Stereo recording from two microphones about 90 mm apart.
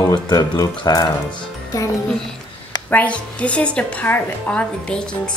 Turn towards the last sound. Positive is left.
turn(degrees=10)  # may be behind; listen again after turning